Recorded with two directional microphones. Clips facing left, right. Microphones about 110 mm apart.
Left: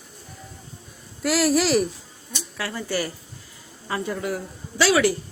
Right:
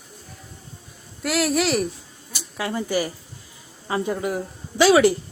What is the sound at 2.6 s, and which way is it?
A woman's voice, 20° right (ahead or behind).